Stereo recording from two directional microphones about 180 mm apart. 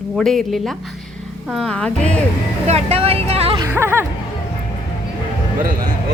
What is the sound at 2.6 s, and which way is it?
Speech, 35° right (ahead or behind).